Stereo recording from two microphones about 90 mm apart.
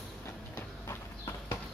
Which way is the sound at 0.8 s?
35° left (ahead or behind).